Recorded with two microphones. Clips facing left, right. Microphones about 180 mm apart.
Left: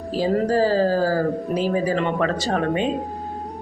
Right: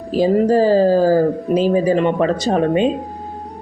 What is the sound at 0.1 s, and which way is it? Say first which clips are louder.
Speech: right 6 dB; 20° right (ahead or behind).